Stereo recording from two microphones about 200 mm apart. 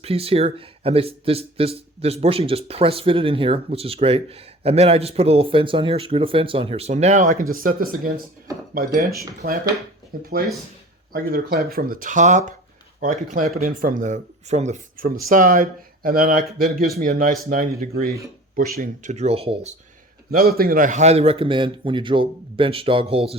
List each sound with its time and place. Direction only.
0.0 s speech: 30° right (ahead or behind)
20.3 s speech: 50° right (ahead or behind); by 23.3 s 30° right (ahead or behind)